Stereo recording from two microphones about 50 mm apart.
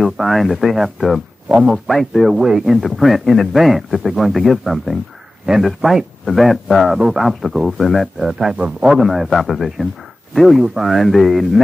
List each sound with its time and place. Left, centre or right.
0.0 s a man's voice: centre
1.5 s a man's voice: right
1.9 s a man's voice: centre
2.2 s a man's voice: centre
7.0 s speech: centre
7.2 s a man's voice: centre
8.5 s a man's voice: right
8.8 s a man's voice: centre
10.6 s speech: centre
10.9 s a man's voice: centre